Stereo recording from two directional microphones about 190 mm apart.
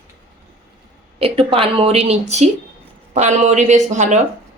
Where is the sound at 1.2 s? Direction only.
30° right (ahead or behind).